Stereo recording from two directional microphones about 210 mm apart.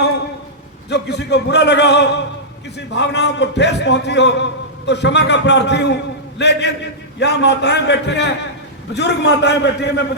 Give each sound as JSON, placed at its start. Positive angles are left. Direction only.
{"t": 0.9, "sound": "a man's voice", "side_deg": 55}